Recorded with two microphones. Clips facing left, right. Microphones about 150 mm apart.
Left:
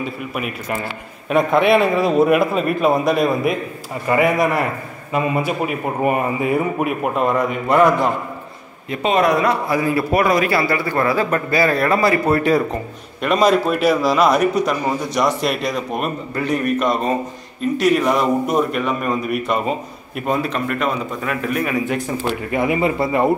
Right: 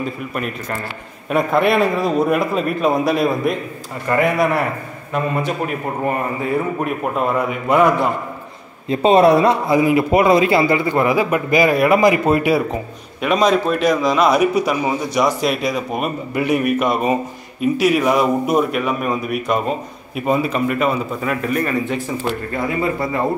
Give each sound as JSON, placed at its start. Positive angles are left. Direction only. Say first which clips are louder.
{"t": 0.0, "sound": "a man's voice", "louder": "right 1 dB", "side_deg": 5}
{"t": 7.2, "sound": "a man's voice", "louder": "left 1 dB", "side_deg": -5}
{"t": 8.8, "sound": "a man's voice", "louder": "right 5 dB", "side_deg": -30}
{"t": 22.5, "sound": "speech", "louder": "left 5 dB", "side_deg": 15}